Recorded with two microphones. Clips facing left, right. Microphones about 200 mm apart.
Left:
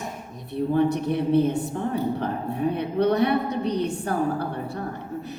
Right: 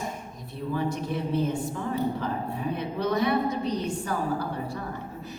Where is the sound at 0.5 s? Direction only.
60° left (ahead or behind).